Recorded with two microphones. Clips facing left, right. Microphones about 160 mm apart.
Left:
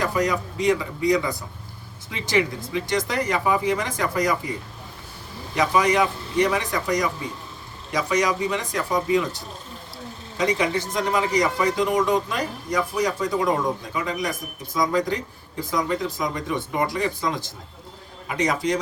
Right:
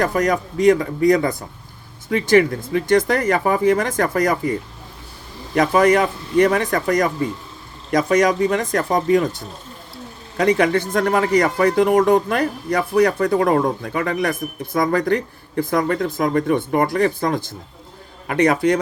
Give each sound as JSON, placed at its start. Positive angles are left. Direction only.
{"t": 0.0, "sound": "speech", "side_deg": -50}
{"t": 5.5, "sound": "speech", "side_deg": -50}
{"t": 10.3, "sound": "speech", "side_deg": -60}